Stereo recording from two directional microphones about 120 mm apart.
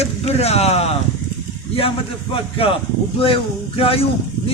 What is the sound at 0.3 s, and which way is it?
Speech, 60° left (ahead or behind).